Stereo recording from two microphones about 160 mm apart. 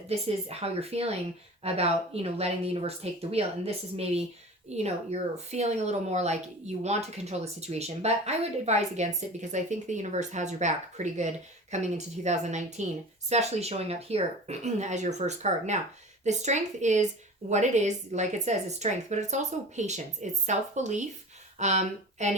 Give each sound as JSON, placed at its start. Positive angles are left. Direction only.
{"t": 0.1, "sound": "a woman's voice", "side_deg": -40}